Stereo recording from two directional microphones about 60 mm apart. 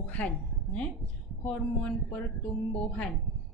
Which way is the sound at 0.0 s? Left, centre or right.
Left.